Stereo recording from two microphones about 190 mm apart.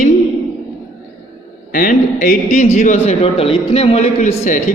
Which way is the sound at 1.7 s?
45° left (ahead or behind).